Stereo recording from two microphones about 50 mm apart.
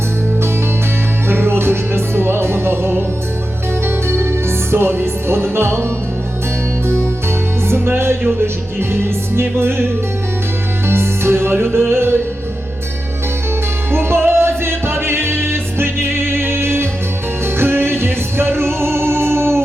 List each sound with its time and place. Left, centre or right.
1.3 s music: right
7.7 s music: right
10.8 s music: right
13.9 s music: right